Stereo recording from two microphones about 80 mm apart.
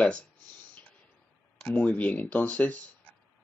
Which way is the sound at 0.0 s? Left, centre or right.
Centre.